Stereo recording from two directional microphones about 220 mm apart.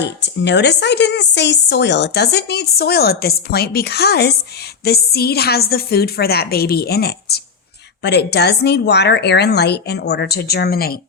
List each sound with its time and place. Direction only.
0.0 s a woman's voice: 50° left (ahead or behind)